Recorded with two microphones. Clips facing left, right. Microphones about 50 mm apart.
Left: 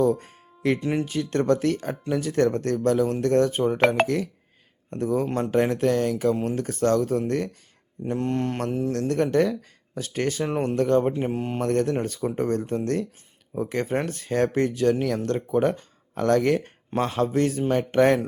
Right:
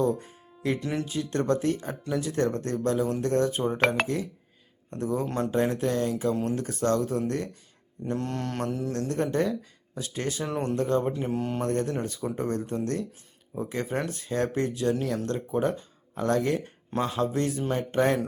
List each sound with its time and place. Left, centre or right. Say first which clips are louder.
0.1 s music: left 4 dB; left
0.8 s mantra: left 5 dB; left
1.0 s speech: left 3 dB; left
1.5 s speech: left 3 dB; left
1.9 s speech: left 4 dB; left
4.0 s speech: left 5 dB; left
6.3 s mantra: left 2 dB; left
6.6 s speech: left 4 dB; left
8.0 s mantra: left 5 dB; left
8.9 s speech: left 6 dB; left
11.1 s mantra: left 2 dB; left
11.6 s speech: left 8 dB; left
16.1 s speech: left 5 dB; left